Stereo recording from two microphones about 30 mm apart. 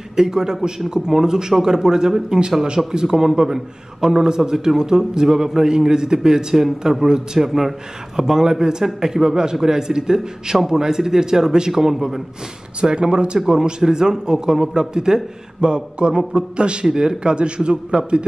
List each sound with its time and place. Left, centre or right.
0.1 s a man's voice: right
8.2 s a man's voice: centre
12.8 s a man's voice: right
16.8 s a man's voice: right